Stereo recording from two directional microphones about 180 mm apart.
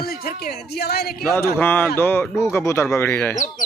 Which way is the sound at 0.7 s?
60° left (ahead or behind).